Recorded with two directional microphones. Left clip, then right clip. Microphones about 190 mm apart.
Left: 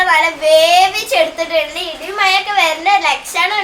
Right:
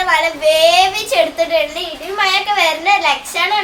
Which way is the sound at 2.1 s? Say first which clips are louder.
Left 1 dB; 5° left (ahead or behind).